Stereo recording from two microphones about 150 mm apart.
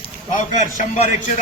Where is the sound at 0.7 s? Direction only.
55° left (ahead or behind).